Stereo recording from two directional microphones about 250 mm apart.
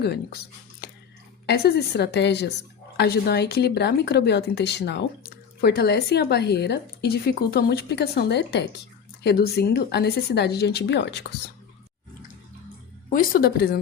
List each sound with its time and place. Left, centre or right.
0.0 s speech: left
13.1 s speech: left